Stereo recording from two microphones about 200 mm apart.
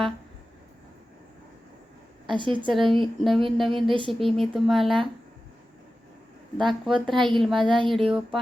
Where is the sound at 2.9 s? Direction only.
Centre (ahead or behind).